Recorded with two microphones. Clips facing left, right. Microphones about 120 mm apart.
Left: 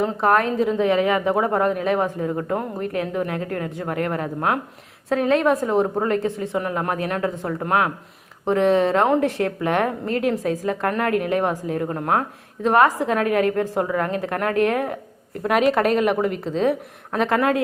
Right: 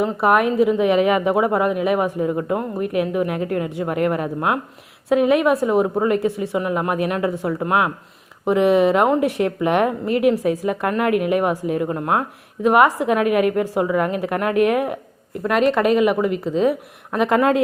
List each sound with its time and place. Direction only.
0.0 s a woman's voice: 10° right (ahead or behind)
15.4 s speech: 5° left (ahead or behind)
17.2 s speech: 20° right (ahead or behind)